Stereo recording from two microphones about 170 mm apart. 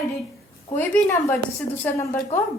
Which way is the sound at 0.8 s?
15° left (ahead or behind).